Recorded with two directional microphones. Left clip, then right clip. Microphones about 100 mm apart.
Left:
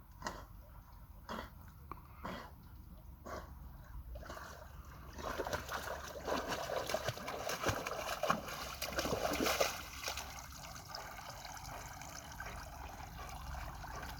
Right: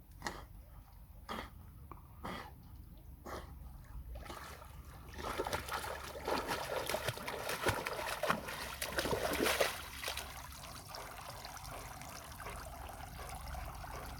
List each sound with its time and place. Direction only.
0.2 s tick-tock: centre (ahead or behind)
1.9 s sneeze: centre (ahead or behind)
4.3 s boat: centre (ahead or behind)